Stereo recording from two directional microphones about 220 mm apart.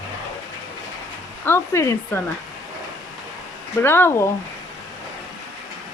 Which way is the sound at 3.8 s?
10° left (ahead or behind).